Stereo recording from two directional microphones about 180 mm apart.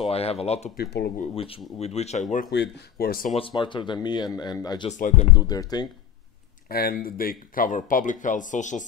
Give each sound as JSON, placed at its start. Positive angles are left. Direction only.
{"t": 0.1, "sound": "speech", "side_deg": 35}
{"t": 0.7, "sound": "speech", "side_deg": 70}
{"t": 1.3, "sound": "speech", "side_deg": 30}
{"t": 2.5, "sound": "speech", "side_deg": 65}
{"t": 3.3, "sound": "speech", "side_deg": 30}
{"t": 4.8, "sound": "speech", "side_deg": 45}
{"t": 5.3, "sound": "speech", "side_deg": 20}
{"t": 6.7, "sound": "speech", "side_deg": 55}